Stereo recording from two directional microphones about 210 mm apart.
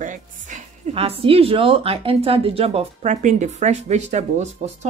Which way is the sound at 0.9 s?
25° right (ahead or behind).